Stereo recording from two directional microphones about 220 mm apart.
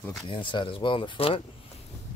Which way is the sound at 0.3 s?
20° left (ahead or behind).